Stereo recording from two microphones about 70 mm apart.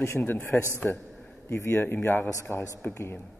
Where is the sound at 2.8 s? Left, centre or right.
Left.